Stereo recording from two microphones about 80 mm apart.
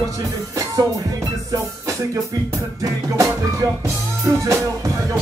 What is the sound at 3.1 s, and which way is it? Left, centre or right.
Music, right.